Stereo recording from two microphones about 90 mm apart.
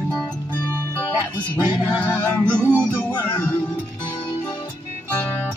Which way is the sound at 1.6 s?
15° right (ahead or behind).